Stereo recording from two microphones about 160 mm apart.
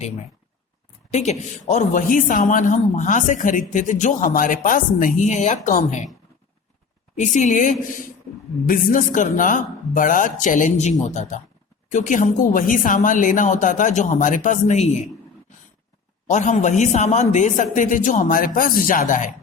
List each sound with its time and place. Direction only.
1.1 s a man's voice: 45° left (ahead or behind)
7.2 s a man's voice: 50° left (ahead or behind)
16.2 s a man's voice: 50° left (ahead or behind)